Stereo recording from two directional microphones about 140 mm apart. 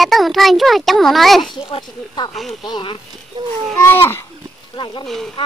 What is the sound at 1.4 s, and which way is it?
Speech, 35° left (ahead or behind).